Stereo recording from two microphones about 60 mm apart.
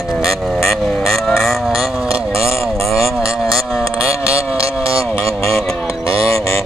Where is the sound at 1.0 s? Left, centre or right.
Centre.